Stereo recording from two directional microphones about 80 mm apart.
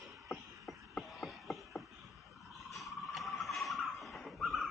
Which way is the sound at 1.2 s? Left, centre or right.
Centre.